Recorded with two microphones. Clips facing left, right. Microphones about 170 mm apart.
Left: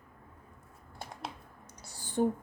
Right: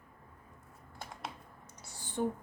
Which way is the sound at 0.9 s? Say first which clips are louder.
Left 2 dB; 30° left (ahead or behind).